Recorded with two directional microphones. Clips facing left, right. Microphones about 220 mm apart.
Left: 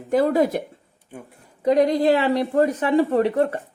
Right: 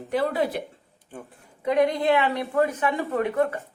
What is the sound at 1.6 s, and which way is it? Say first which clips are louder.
Speech: left 4 dB; 40° left (ahead or behind).